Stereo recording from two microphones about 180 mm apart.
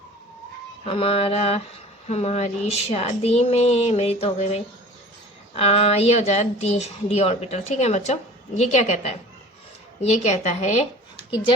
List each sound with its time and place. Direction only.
0.9 s a woman's voice: 30° left (ahead or behind)